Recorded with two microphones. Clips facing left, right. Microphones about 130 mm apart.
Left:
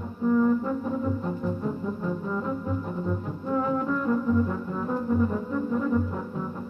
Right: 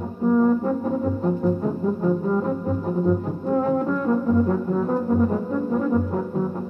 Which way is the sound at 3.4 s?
45° right (ahead or behind).